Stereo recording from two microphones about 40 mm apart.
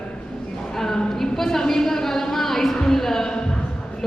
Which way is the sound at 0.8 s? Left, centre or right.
Centre.